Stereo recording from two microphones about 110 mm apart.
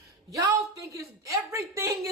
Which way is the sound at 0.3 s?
30° right (ahead or behind).